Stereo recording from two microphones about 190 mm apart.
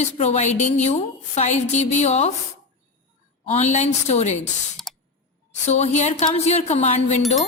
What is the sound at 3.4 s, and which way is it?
Speech, 35° left (ahead or behind).